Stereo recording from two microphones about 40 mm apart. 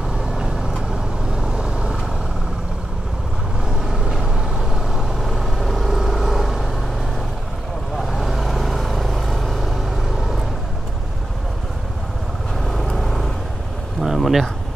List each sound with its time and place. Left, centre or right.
0.4 s vehicle: centre
3.8 s vehicle: centre
8.0 s vehicle: centre
12.6 s vehicle: centre
14.0 s a sound: centre